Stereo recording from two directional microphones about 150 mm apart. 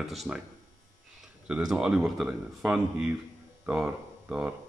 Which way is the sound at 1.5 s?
5° right (ahead or behind).